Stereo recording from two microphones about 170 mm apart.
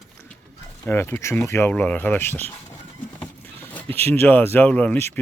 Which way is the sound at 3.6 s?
15° left (ahead or behind).